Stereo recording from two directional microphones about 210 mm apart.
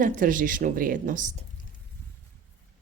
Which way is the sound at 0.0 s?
40° right (ahead or behind).